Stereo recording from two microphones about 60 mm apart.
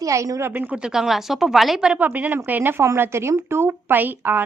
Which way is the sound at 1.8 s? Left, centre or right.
Right.